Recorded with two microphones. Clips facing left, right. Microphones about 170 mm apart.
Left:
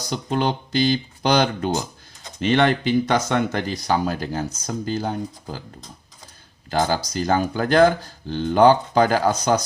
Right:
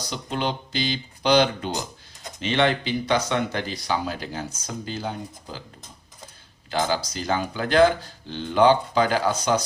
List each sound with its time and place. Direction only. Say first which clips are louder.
0.1 s speech: left 5 dB; 45° left (ahead or behind)
6.7 s speech: left 3 dB; 45° left (ahead or behind)